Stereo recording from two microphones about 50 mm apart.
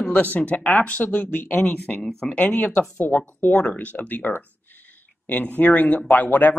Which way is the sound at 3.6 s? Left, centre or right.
Left.